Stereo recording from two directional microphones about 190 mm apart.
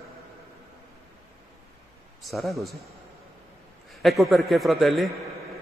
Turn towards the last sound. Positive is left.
turn(degrees=0)  # may be behind; listen again after turning